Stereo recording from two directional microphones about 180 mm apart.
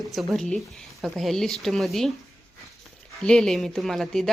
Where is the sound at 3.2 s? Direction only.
5° left (ahead or behind).